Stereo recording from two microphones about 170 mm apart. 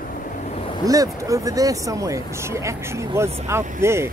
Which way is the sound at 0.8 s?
20° right (ahead or behind).